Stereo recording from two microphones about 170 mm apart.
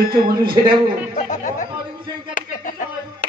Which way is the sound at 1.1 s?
45° left (ahead or behind).